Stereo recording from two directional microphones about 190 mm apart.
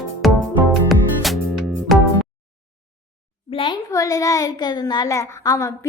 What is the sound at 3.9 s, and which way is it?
A child's voice, 15° left (ahead or behind).